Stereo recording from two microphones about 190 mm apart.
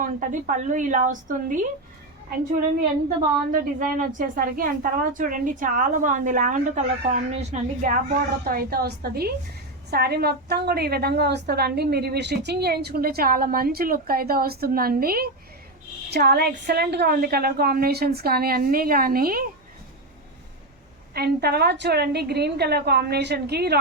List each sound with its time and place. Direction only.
0.0 s a woman's voice: 45° right (ahead or behind)
3.5 s a woman's voice: 45° right (ahead or behind)
21.1 s a woman's voice: 55° right (ahead or behind)